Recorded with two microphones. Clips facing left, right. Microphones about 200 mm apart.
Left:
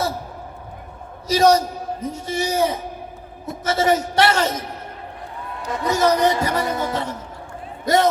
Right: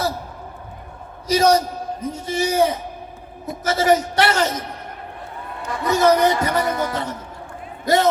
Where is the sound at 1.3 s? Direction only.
25° left (ahead or behind).